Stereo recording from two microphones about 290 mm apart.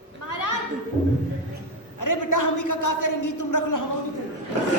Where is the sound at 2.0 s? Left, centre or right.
Left.